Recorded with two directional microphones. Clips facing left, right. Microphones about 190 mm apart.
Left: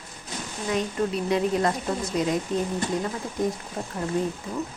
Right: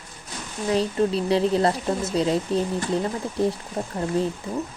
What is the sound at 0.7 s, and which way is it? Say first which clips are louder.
Speech: right 4 dB; 30° right (ahead or behind).